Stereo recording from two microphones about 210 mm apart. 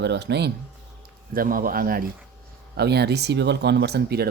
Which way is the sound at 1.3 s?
40° right (ahead or behind).